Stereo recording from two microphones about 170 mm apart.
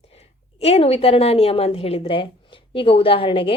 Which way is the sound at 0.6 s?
35° left (ahead or behind).